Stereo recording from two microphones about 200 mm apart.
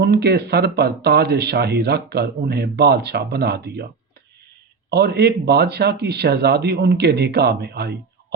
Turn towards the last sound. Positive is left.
turn(degrees=-55)  # may be behind; listen again after turning